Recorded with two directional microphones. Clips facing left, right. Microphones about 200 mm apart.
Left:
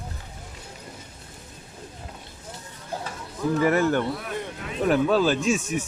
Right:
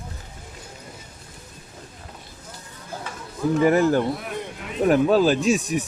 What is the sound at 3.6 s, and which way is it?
Speech, 30° right (ahead or behind).